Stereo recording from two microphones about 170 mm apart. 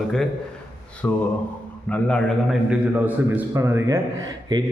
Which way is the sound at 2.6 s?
10° right (ahead or behind).